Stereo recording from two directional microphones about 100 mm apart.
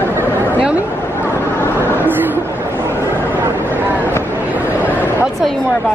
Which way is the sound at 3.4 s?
20° right (ahead or behind).